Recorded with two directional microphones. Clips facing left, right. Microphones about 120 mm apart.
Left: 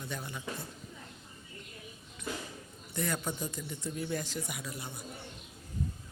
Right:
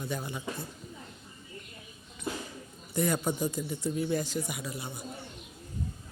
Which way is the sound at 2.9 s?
15° right (ahead or behind).